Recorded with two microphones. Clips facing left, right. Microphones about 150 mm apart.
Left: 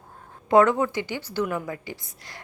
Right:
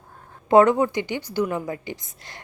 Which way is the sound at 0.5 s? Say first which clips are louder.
Right 3 dB; 20° right (ahead or behind).